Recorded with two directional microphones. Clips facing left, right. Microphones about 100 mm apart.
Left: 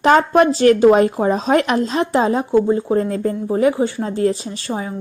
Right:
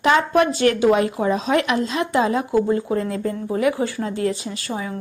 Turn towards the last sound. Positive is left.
turn(degrees=30)  # may be behind; listen again after turning